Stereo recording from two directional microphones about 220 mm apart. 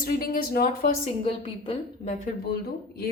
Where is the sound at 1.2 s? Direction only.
25° left (ahead or behind).